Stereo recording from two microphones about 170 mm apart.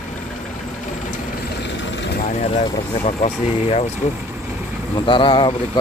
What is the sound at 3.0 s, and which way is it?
Speech, 40° left (ahead or behind).